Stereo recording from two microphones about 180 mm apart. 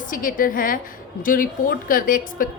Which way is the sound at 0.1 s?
50° left (ahead or behind).